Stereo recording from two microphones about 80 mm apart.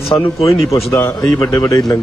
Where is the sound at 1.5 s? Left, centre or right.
Left.